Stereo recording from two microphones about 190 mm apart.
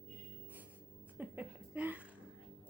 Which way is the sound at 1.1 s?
10° right (ahead or behind).